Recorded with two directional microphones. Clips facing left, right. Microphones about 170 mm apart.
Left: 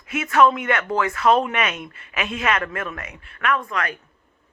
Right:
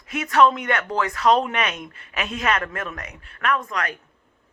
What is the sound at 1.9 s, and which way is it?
Speech, 40° right (ahead or behind).